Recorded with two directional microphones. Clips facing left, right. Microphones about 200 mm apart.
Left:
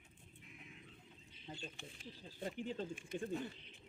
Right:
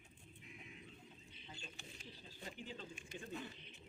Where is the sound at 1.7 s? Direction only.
50° left (ahead or behind).